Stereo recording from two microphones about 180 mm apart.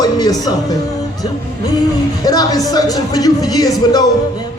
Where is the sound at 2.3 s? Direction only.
20° left (ahead or behind).